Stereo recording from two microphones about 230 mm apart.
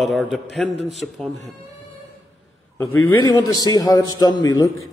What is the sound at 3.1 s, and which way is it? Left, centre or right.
A man's voice, centre.